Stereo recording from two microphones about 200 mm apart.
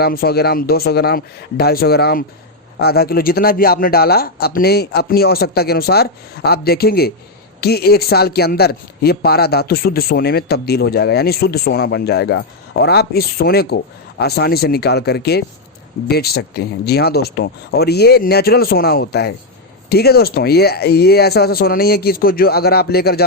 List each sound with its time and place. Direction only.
0.0 s a man's voice: 50° left (ahead or behind)